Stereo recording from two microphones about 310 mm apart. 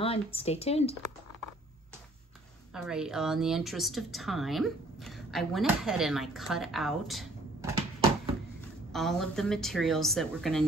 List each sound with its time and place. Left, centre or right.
0.0 s speech: centre
2.7 s a woman's voice: centre
8.9 s a woman's voice: centre